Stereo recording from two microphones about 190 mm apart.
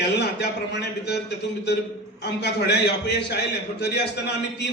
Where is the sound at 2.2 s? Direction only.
60° left (ahead or behind).